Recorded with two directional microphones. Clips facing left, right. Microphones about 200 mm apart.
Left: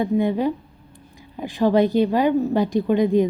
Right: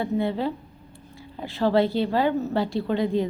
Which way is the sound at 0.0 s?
15° left (ahead or behind).